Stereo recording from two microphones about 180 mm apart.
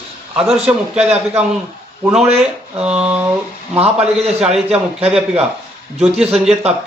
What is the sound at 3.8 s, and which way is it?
Speech, 35° right (ahead or behind).